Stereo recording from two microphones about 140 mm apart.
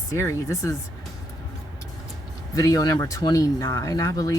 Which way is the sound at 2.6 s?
25° left (ahead or behind).